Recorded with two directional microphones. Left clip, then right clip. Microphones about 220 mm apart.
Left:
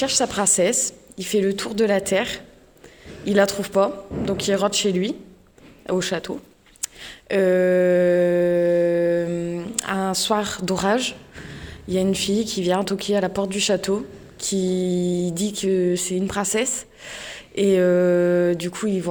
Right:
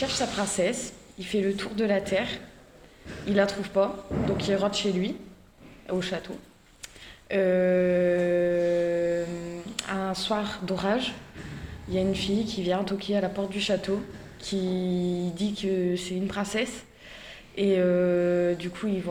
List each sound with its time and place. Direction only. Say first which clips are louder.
0.0 s mantra: left 7 dB; 50° left (ahead or behind)